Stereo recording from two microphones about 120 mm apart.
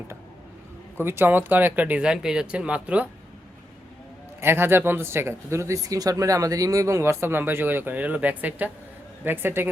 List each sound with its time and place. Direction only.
0.9 s speech: 20° right (ahead or behind)
4.4 s speech: 20° right (ahead or behind)